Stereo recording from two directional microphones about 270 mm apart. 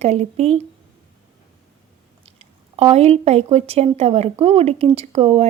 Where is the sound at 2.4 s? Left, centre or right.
Right.